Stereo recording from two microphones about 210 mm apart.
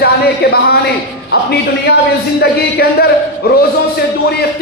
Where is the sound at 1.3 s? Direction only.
50° left (ahead or behind).